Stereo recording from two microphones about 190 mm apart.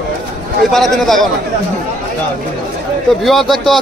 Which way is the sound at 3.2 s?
Centre (ahead or behind).